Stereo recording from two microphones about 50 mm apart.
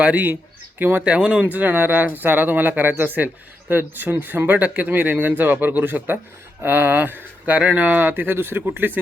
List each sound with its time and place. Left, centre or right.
0.0 s speech: right
0.8 s speech: right
1.0 s speech: right
1.5 s speech: right
7.5 s speech: right